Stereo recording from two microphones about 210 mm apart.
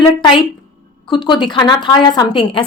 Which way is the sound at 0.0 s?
20° left (ahead or behind).